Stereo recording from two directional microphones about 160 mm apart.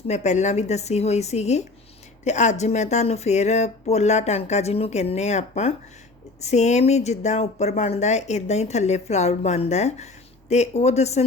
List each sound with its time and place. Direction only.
0.1 s speech: 45° left (ahead or behind)